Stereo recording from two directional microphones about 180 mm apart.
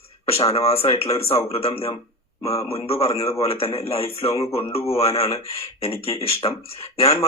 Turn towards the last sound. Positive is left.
turn(degrees=35)  # may be behind; listen again after turning